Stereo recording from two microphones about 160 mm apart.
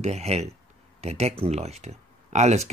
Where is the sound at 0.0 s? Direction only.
45° right (ahead or behind).